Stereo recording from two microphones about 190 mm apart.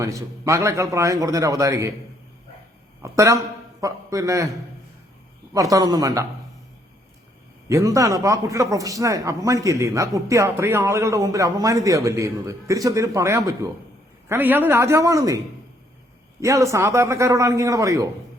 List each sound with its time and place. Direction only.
0.0 s a man's voice: 15° right (ahead or behind)
3.0 s a man's voice: 15° right (ahead or behind)
5.5 s a man's voice: 20° right (ahead or behind)
7.7 s a man's voice: 15° right (ahead or behind)
16.4 s a man's voice: 15° right (ahead or behind)